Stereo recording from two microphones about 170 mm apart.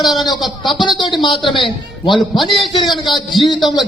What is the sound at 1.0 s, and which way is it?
Speech, 25° left (ahead or behind).